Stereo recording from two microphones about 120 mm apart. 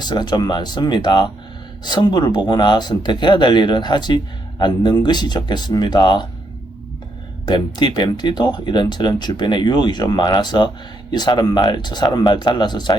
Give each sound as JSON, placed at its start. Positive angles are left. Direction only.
{"t": 0.0, "sound": "speech", "side_deg": 35}
{"t": 7.4, "sound": "speech", "side_deg": 40}